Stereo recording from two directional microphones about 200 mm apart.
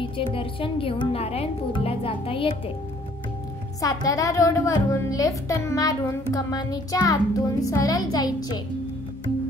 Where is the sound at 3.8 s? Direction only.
20° left (ahead or behind).